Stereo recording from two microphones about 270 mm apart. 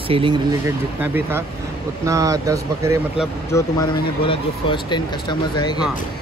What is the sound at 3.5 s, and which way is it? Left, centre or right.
Speech, centre.